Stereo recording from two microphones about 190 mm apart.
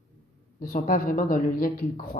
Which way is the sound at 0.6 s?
50° left (ahead or behind).